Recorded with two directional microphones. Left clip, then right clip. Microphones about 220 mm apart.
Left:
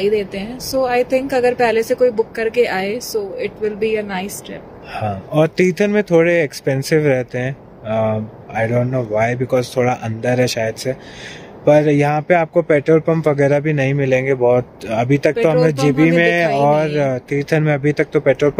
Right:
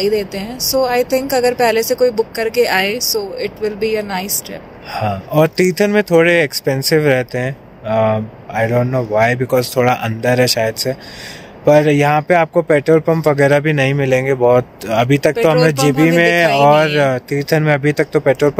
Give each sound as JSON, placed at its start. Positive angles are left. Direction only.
{"t": 0.0, "sound": "a woman's voice", "side_deg": 20}
{"t": 4.9, "sound": "speech", "side_deg": 0}